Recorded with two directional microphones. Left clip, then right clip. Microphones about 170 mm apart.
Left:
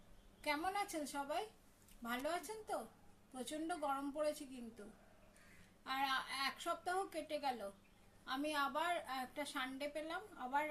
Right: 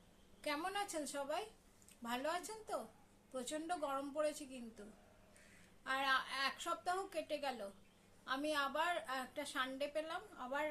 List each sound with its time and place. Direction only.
0.4 s a woman's voice: 15° right (ahead or behind)
5.8 s a woman's voice: 15° right (ahead or behind)